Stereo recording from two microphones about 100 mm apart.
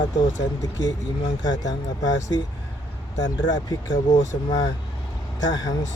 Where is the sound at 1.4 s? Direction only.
40° left (ahead or behind).